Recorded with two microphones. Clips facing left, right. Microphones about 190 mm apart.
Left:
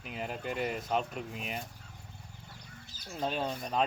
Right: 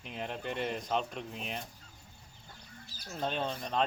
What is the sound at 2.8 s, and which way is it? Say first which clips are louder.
Bird: even; 20° left (ahead or behind).